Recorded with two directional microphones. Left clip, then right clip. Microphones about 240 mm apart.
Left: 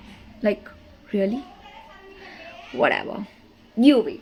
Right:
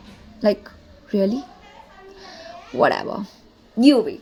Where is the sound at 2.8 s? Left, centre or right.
Right.